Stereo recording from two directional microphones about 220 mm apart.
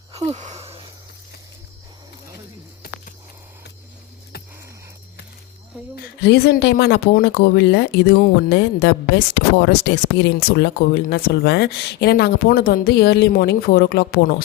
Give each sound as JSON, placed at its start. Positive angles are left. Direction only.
{"t": 0.3, "sound": "wheeze", "side_deg": -30}
{"t": 6.2, "sound": "speech", "side_deg": 50}